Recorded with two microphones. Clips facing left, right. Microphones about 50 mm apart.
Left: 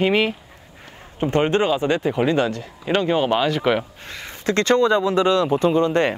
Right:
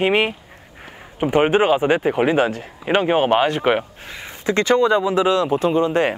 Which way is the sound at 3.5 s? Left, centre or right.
Centre.